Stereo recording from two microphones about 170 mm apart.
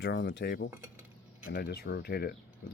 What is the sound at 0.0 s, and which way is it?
Cutlery, 90° left.